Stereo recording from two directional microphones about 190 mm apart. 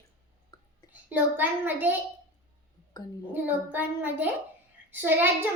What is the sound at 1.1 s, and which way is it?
Speech, 10° right (ahead or behind).